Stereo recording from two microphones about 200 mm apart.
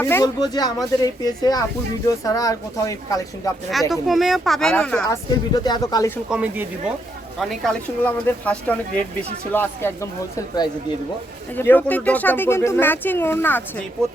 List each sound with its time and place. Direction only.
0.0 s speech: 15° left (ahead or behind)
3.7 s speech: centre (ahead or behind)
5.5 s speech: 20° left (ahead or behind)
6.3 s speech: 5° right (ahead or behind); by 13.8 s 10° left (ahead or behind)